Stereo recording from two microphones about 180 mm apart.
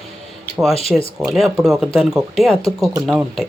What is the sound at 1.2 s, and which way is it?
A man's voice, centre (ahead or behind).